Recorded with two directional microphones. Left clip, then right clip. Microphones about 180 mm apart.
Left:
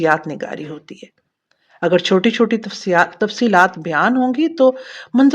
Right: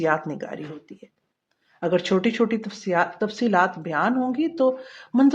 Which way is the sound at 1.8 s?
25° left (ahead or behind).